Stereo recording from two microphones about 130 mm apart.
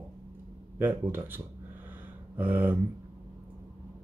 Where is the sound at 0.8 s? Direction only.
15° right (ahead or behind).